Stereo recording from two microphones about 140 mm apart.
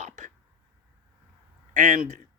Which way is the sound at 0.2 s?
60° right (ahead or behind).